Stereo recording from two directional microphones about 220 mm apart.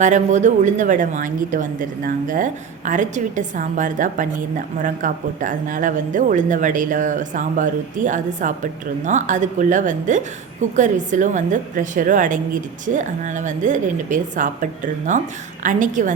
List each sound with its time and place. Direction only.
0.0 s a woman's voice: 35° right (ahead or behind)